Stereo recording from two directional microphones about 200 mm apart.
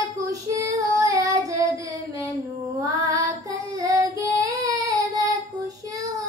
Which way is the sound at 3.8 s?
20° right (ahead or behind).